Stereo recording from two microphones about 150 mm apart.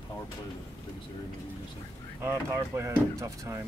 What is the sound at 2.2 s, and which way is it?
Speech, 20° right (ahead or behind).